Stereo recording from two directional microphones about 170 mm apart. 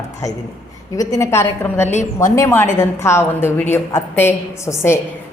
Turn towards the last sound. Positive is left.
turn(degrees=15)  # may be behind; listen again after turning